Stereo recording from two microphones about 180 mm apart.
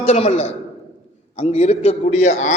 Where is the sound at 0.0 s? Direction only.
35° left (ahead or behind).